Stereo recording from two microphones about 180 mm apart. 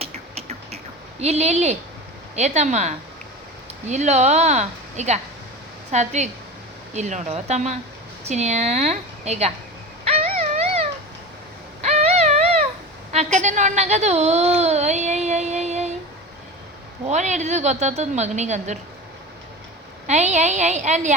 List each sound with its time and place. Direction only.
0.0 s a sound: 35° right (ahead or behind)
1.2 s a woman's voice: 35° right (ahead or behind)
10.0 s dog: 35° right (ahead or behind)
11.8 s a sound: 40° right (ahead or behind)
13.1 s a woman's voice: 40° right (ahead or behind)
17.1 s a woman's voice: 40° right (ahead or behind)
20.1 s a woman's voice: 40° right (ahead or behind)